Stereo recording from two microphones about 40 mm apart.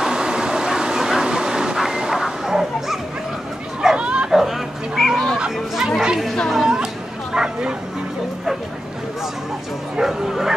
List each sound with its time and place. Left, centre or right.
0.0 s a sound: centre
1.2 s bow-wow: centre
3.8 s bow-wow: right
4.3 s fowl: centre
5.8 s chatter: centre
6.5 s a sound: centre
7.3 s bow-wow: centre
9.9 s bow-wow: centre